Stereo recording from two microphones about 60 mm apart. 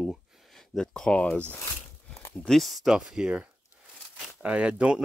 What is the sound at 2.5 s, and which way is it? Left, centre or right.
Speech, centre.